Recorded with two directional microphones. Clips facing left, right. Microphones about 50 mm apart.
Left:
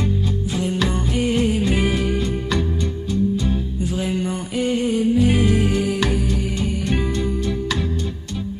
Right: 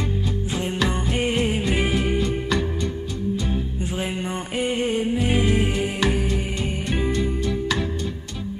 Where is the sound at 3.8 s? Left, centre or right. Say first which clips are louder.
Left 4 dB; right.